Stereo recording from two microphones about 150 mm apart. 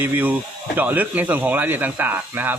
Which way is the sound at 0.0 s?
15° right (ahead or behind).